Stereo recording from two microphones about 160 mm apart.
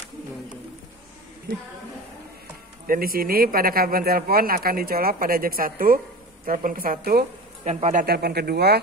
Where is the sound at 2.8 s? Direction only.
65° right (ahead or behind).